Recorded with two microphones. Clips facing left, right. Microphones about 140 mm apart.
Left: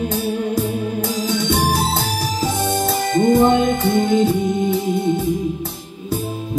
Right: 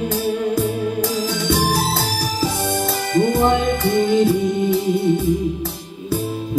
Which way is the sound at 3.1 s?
30° left (ahead or behind).